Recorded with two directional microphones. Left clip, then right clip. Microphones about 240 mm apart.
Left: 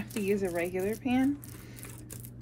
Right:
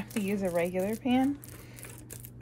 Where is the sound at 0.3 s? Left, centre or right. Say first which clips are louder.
Even; right.